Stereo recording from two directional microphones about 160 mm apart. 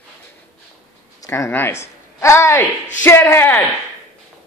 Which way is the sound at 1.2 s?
20° left (ahead or behind).